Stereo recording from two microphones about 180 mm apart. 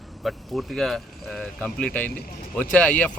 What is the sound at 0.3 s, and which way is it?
Speech, centre (ahead or behind).